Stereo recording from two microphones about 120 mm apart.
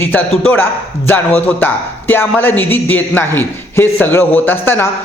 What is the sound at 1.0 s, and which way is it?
A man's voice, 15° left (ahead or behind).